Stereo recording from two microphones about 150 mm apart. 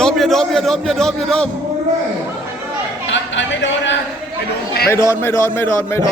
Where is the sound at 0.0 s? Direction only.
Centre (ahead or behind).